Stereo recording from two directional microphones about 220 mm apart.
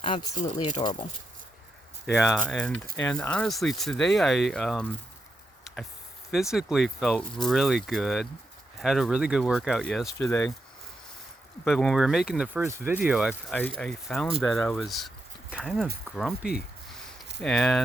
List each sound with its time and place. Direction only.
0.0 s speech: 25° left (ahead or behind)
2.0 s speech: centre (ahead or behind)
6.3 s speech: centre (ahead or behind)
10.2 s speech: 15° left (ahead or behind)
11.6 s speech: centre (ahead or behind)
13.6 s speech: 5° left (ahead or behind)
16.4 s speech: 45° left (ahead or behind)
17.4 s speech: centre (ahead or behind)